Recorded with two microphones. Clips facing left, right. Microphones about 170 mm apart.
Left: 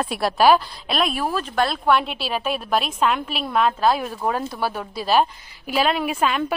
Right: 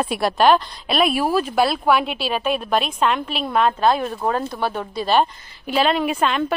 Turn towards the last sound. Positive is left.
turn(degrees=5)  # may be behind; listen again after turning